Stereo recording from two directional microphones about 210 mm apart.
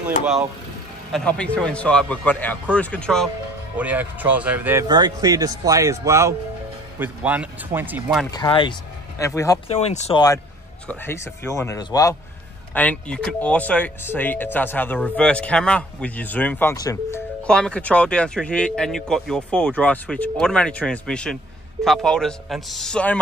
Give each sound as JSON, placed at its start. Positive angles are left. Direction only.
{"t": 1.1, "sound": "speech", "side_deg": 5}
{"t": 3.7, "sound": "a man's voice", "side_deg": -5}
{"t": 4.8, "sound": "a man's voice", "side_deg": -20}
{"t": 8.3, "sound": "speech", "side_deg": 20}
{"t": 9.7, "sound": "speech", "side_deg": 30}
{"t": 10.9, "sound": "speech", "side_deg": 10}
{"t": 17.5, "sound": "speech", "side_deg": 5}